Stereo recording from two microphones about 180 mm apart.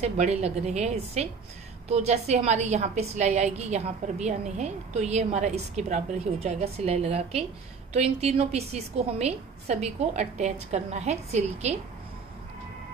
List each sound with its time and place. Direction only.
0.0 s a woman's voice: 35° right (ahead or behind)